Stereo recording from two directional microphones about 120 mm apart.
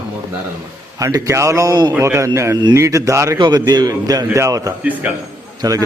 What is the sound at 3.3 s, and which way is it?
A man's voice, 40° right (ahead or behind).